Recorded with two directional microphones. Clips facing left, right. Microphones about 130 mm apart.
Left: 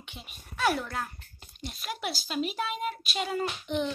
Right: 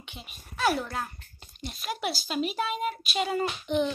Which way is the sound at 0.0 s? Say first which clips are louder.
Right 1 dB; centre (ahead or behind).